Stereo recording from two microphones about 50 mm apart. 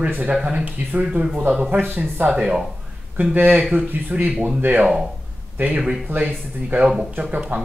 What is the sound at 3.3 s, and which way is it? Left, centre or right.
Speech, right.